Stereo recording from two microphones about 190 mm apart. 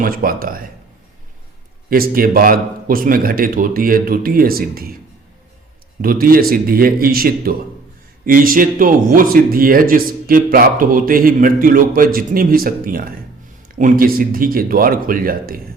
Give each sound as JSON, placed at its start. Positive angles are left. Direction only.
{"t": 0.0, "sound": "speech", "side_deg": -50}
{"t": 1.9, "sound": "speech", "side_deg": -50}
{"t": 6.0, "sound": "speech", "side_deg": -50}